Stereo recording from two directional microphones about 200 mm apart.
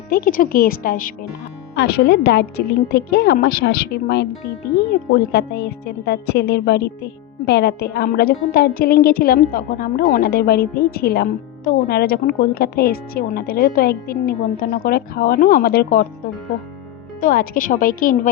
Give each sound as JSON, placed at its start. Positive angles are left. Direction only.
{"t": 0.1, "sound": "a woman's voice", "side_deg": 45}
{"t": 1.7, "sound": "a woman's voice", "side_deg": 55}
{"t": 17.2, "sound": "a woman's voice", "side_deg": 45}